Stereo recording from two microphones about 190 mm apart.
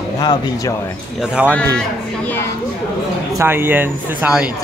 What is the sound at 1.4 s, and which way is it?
Speech, 5° right (ahead or behind).